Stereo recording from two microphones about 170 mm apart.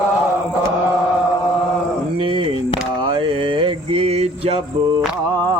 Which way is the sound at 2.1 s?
30° right (ahead or behind).